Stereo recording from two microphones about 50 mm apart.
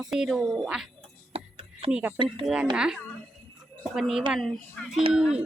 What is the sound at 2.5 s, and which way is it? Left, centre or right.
Speech, centre.